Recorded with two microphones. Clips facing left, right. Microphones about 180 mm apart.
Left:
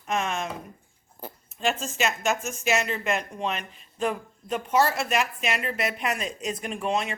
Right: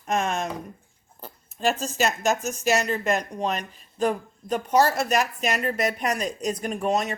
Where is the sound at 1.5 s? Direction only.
40° right (ahead or behind).